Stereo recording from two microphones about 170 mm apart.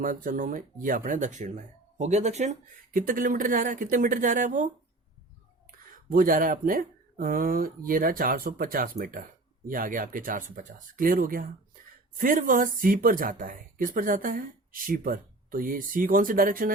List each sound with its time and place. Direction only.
0.0 s speech: 55° right (ahead or behind)
5.9 s speech: 55° right (ahead or behind)